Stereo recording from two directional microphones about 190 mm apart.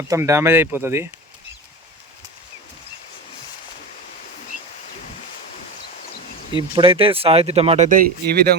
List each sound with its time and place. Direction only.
0.1 s speech: 15° right (ahead or behind)
6.7 s speech: 25° right (ahead or behind)
7.9 s speech: 50° right (ahead or behind)